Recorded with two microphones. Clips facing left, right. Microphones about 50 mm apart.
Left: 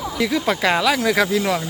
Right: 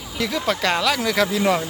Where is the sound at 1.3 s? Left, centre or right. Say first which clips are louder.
Right 1 dB; centre.